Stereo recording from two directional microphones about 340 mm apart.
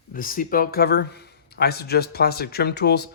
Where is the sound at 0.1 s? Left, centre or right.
Left.